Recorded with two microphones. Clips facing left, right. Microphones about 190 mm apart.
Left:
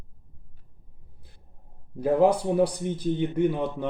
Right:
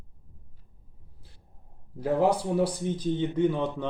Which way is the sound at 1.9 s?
20° left (ahead or behind).